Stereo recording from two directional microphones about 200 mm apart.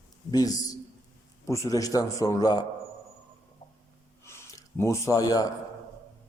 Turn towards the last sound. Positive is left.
turn(degrees=20)  # may be behind; listen again after turning